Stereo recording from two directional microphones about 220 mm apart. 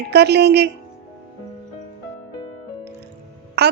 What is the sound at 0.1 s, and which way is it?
Speech, 50° right (ahead or behind).